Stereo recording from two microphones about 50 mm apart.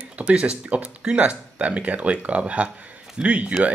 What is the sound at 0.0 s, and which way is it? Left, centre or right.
Speech, right.